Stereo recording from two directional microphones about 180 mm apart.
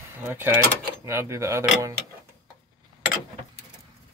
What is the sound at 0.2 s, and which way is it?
Speech, 10° right (ahead or behind).